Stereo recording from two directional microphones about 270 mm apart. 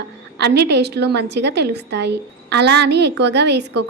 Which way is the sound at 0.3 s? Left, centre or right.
Right.